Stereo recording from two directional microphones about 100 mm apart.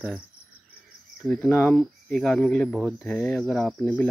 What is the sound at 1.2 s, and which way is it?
Speech, 15° left (ahead or behind).